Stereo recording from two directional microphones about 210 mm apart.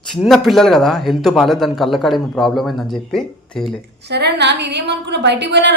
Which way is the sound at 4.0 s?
50° right (ahead or behind).